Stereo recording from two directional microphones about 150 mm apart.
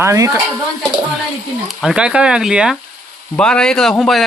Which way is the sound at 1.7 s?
5° right (ahead or behind).